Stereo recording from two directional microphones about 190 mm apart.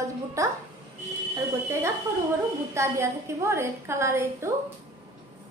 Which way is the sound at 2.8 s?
15° right (ahead or behind).